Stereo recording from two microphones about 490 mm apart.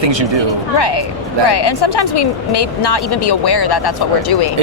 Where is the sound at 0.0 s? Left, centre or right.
Right.